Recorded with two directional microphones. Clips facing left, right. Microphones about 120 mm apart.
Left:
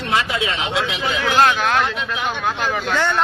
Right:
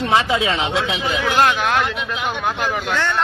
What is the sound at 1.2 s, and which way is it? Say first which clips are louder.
Speech: left 1 dB; 10° right (ahead or behind).